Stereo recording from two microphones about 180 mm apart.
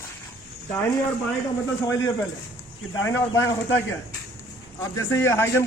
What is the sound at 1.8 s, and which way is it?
A man's voice, 20° left (ahead or behind).